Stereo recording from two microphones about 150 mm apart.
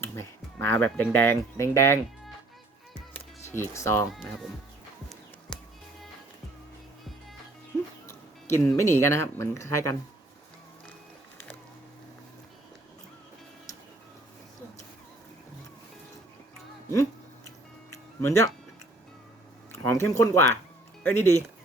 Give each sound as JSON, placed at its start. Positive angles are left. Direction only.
{"t": 0.0, "sound": "speech", "side_deg": 15}
{"t": 3.1, "sound": "music", "side_deg": 15}
{"t": 4.1, "sound": "speech", "side_deg": 0}
{"t": 5.5, "sound": "music", "side_deg": 5}
{"t": 8.0, "sound": "music", "side_deg": 20}
{"t": 8.6, "sound": "speech", "side_deg": 15}
{"t": 17.9, "sound": "music", "side_deg": 20}
{"t": 19.9, "sound": "speech", "side_deg": 20}